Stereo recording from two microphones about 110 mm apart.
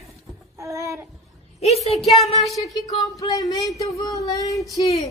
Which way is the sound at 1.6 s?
80° left.